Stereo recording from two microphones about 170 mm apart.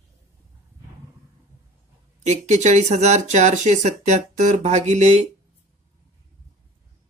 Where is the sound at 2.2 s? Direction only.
45° right (ahead or behind).